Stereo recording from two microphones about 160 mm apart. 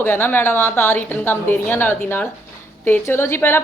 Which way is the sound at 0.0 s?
10° left (ahead or behind).